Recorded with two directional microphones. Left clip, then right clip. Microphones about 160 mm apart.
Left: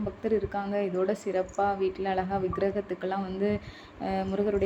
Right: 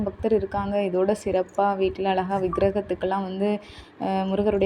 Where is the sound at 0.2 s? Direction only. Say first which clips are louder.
Right 5 dB; 35° right (ahead or behind).